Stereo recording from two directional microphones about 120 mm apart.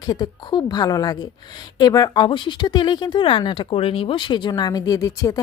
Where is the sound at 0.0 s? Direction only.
35° left (ahead or behind).